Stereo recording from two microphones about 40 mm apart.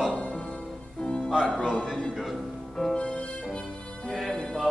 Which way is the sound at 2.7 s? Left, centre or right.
Centre.